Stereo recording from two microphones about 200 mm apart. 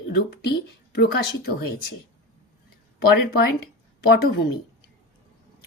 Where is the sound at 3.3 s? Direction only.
50° left (ahead or behind).